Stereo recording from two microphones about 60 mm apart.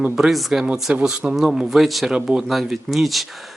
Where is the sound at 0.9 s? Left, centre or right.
Right.